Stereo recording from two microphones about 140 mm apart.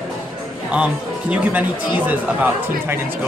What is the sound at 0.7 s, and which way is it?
Speech, 10° right (ahead or behind).